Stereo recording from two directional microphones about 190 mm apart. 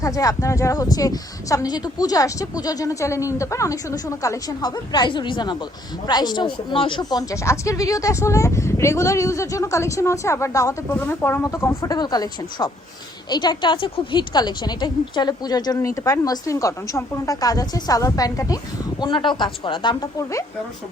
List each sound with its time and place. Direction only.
0.0 s a woman's voice: 20° left (ahead or behind)